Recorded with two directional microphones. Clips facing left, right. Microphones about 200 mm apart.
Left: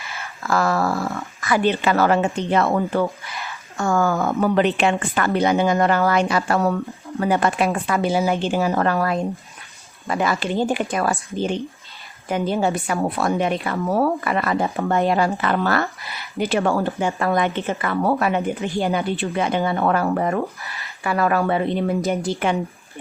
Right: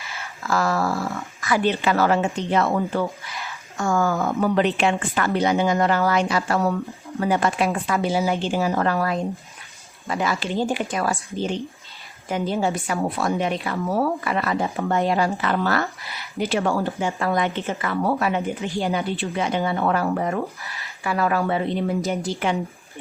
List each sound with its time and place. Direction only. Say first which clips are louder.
0.4 s a woman's voice: left 2 dB; 55° left (ahead or behind)